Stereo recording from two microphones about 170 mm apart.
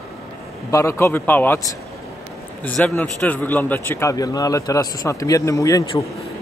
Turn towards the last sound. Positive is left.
turn(degrees=20)  # may be behind; listen again after turning